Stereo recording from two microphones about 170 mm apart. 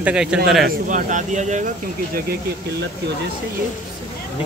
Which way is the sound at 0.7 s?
50° right (ahead or behind).